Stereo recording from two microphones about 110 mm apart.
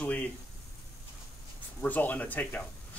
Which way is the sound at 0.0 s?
15° left (ahead or behind).